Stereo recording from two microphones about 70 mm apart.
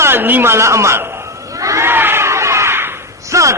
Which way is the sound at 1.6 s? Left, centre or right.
Right.